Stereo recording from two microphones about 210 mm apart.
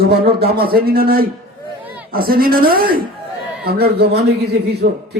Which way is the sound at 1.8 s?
10° right (ahead or behind).